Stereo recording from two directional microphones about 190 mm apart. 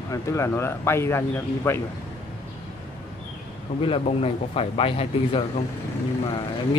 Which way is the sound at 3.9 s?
30° left (ahead or behind).